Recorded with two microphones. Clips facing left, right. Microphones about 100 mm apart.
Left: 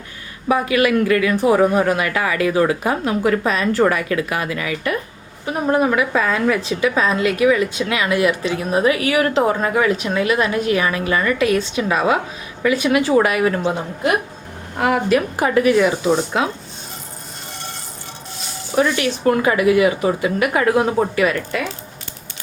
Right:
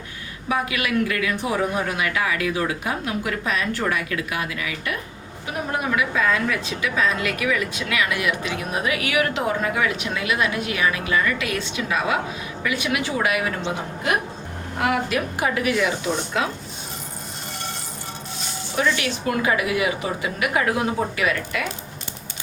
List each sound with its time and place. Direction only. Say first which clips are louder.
0.4 s a woman's voice: left 8 dB; 40° left (ahead or behind)
14.8 s a woman's voice: left 6 dB; 35° left (ahead or behind)
18.9 s a woman's voice: left 7 dB; 40° left (ahead or behind)